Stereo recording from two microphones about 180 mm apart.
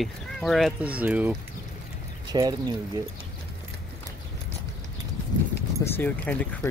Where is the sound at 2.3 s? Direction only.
20° right (ahead or behind).